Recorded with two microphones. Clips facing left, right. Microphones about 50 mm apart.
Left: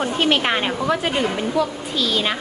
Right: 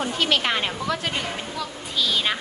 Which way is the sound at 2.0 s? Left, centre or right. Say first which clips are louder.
Left 2 dB; centre.